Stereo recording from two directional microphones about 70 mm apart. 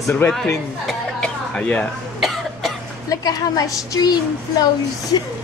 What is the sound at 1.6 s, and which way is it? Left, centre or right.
Speech, left.